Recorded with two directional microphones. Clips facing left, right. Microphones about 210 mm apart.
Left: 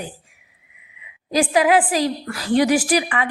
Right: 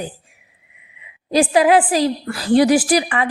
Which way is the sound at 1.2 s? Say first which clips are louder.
Right 3 dB; 30° right (ahead or behind).